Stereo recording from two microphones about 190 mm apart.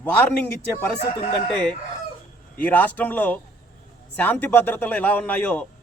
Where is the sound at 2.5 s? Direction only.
10° left (ahead or behind).